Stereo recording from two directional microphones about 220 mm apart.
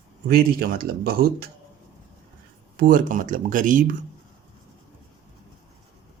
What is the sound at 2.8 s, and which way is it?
Speech, 40° right (ahead or behind).